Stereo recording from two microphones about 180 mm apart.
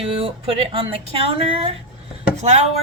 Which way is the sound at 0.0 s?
30° right (ahead or behind).